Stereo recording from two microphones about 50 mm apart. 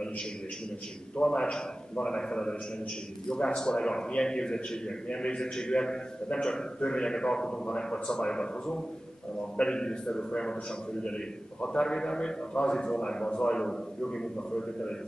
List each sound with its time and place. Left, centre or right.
1.1 s a man's voice: centre